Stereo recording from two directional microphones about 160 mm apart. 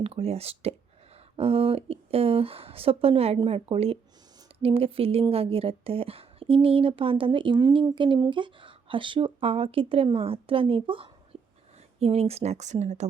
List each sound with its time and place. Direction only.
0.0 s speech: 40° right (ahead or behind)